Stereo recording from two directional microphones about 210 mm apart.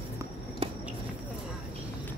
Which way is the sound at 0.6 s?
25° right (ahead or behind).